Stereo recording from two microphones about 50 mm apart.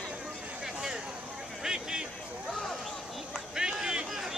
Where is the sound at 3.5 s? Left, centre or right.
Centre.